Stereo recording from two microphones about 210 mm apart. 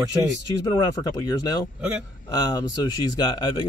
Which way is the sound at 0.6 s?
15° left (ahead or behind).